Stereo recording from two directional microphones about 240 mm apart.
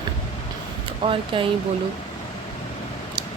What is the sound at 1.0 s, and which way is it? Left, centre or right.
Speech, right.